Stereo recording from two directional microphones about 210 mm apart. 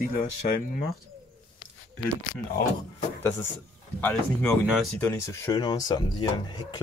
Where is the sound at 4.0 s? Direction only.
10° left (ahead or behind).